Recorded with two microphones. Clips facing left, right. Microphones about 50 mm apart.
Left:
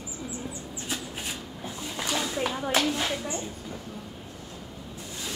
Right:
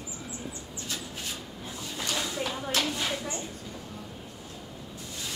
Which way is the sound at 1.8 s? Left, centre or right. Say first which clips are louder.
Left 3 dB; left.